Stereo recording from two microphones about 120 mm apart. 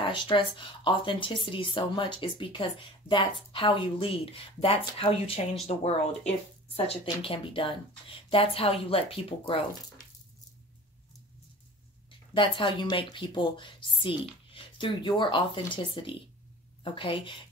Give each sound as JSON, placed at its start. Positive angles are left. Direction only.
{"t": 0.0, "sound": "a woman's voice", "side_deg": 45}
{"t": 6.9, "sound": "a woman's voice", "side_deg": 50}
{"t": 12.4, "sound": "a woman's voice", "side_deg": 45}